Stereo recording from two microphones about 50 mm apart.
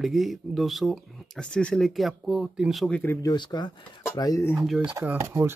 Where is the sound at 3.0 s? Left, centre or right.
Left.